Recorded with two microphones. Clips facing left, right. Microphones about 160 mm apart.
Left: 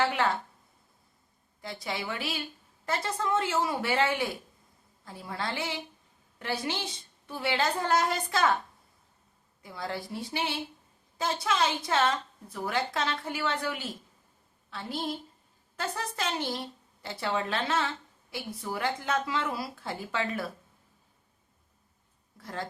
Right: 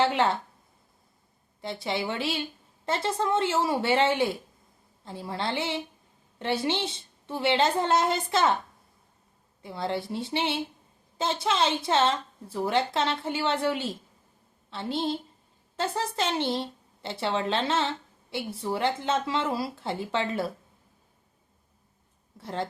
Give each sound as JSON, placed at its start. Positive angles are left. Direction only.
{"t": 0.0, "sound": "a woman's voice", "side_deg": -25}
{"t": 1.6, "sound": "a woman's voice", "side_deg": -25}
{"t": 9.6, "sound": "a woman's voice", "side_deg": -25}
{"t": 22.4, "sound": "a woman's voice", "side_deg": -25}